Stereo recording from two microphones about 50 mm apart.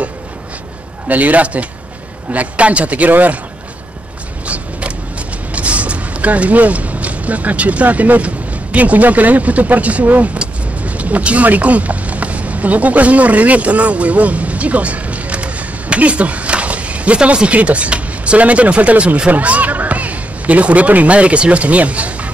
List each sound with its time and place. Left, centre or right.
1.0 s speech: right
4.5 s a sound: right
8.7 s speech: right